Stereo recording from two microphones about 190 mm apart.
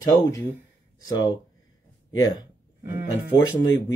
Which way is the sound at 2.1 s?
90° left.